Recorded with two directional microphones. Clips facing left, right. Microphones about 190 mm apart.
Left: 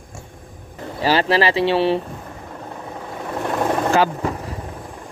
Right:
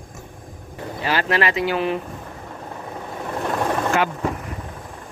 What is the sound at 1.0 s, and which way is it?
Speech, 30° left (ahead or behind).